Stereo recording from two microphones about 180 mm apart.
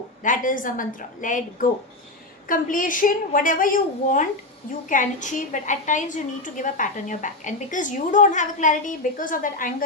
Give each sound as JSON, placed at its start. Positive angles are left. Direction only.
{"t": 0.2, "sound": "a woman's voice", "side_deg": 45}